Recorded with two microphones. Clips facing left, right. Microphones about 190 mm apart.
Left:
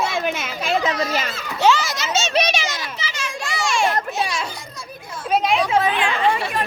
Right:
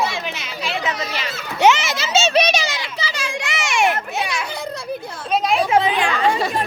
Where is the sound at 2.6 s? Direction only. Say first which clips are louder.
Right 2 dB; 35° right (ahead or behind).